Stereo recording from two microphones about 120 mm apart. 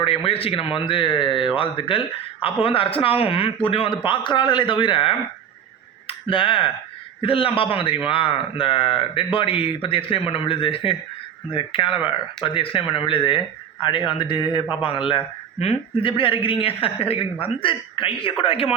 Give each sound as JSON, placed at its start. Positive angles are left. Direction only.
{"t": 0.0, "sound": "a woman's voice", "side_deg": 50}